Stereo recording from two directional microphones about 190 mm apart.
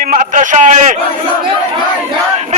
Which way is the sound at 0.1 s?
45° right (ahead or behind).